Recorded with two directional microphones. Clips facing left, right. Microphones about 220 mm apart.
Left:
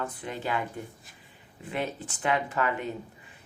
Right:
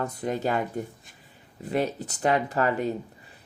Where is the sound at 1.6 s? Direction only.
40° right (ahead or behind).